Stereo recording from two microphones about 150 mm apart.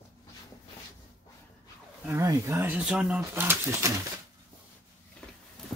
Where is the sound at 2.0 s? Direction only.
20° right (ahead or behind).